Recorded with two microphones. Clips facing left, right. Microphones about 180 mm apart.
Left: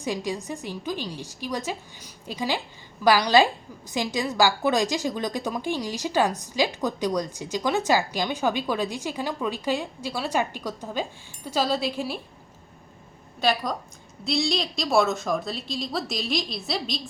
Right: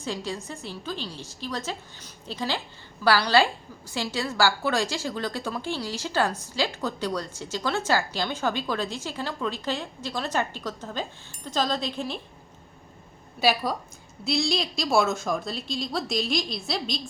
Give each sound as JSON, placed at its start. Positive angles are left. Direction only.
{"t": 0.0, "sound": "a woman's voice", "side_deg": 15}
{"t": 13.4, "sound": "a woman's voice", "side_deg": -5}